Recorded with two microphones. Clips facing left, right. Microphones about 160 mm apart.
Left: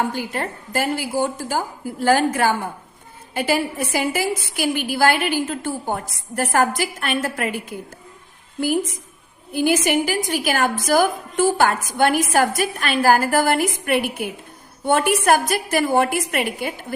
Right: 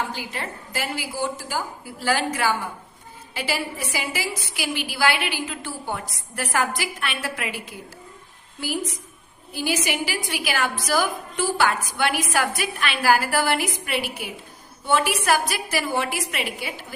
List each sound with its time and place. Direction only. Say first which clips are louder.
0.1 s a woman's voice: left 6 dB; 50° left (ahead or behind)